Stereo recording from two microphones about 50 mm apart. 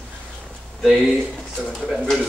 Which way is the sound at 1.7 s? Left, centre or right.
Centre.